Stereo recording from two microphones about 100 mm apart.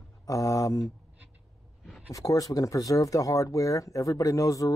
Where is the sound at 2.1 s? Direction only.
35° left (ahead or behind).